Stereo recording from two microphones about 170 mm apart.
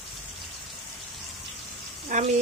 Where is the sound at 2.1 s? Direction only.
45° right (ahead or behind).